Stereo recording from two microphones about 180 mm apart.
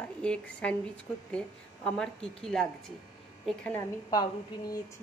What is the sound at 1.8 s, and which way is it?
Speech, 5° left (ahead or behind).